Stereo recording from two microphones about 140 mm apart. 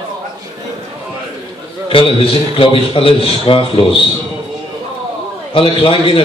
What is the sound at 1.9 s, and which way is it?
A man's voice, 40° left (ahead or behind).